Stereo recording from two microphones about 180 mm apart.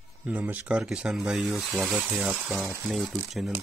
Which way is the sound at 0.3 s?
10° right (ahead or behind).